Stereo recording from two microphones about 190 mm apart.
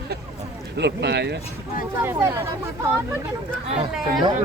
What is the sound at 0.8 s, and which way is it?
Speech, 65° right (ahead or behind).